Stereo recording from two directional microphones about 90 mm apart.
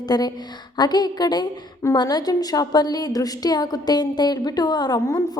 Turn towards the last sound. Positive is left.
turn(degrees=40)  # may be behind; listen again after turning